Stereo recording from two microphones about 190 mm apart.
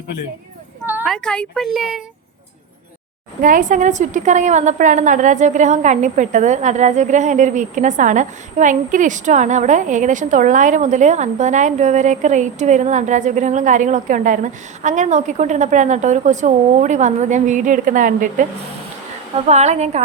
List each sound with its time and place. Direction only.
1.0 s speech: 5° left (ahead or behind)
3.4 s a woman's voice: 45° right (ahead or behind)
19.5 s a woman's voice: 35° right (ahead or behind)